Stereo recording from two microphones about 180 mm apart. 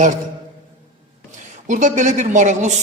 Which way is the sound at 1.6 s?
45° right (ahead or behind).